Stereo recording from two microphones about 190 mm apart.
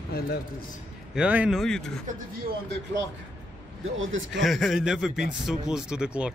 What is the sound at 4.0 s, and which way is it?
Speech, 90° right.